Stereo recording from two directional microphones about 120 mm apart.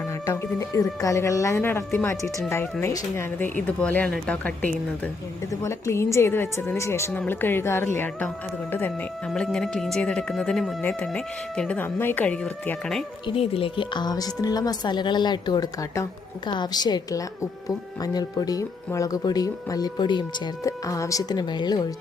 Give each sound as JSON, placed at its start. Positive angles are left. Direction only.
{"t": 0.3, "sound": "speech", "side_deg": 30}
{"t": 3.7, "sound": "a woman's voice", "side_deg": 10}
{"t": 5.6, "sound": "a woman's voice", "side_deg": 25}
{"t": 9.3, "sound": "a woman's voice", "side_deg": 5}
{"t": 13.2, "sound": "speech", "side_deg": 50}
{"t": 20.7, "sound": "speech", "side_deg": 25}